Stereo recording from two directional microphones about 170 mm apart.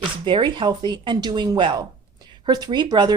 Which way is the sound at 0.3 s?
30° right (ahead or behind).